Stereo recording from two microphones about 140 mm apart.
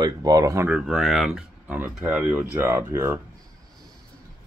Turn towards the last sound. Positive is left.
turn(degrees=-15)  # may be behind; listen again after turning